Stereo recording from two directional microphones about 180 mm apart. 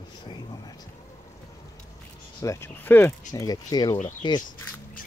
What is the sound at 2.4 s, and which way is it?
A man's voice, 15° left (ahead or behind).